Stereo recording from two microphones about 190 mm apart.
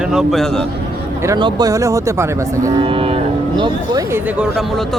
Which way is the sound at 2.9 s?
30° right (ahead or behind).